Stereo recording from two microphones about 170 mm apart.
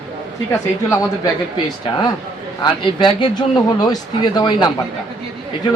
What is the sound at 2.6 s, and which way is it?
A woman's voice, 30° left (ahead or behind).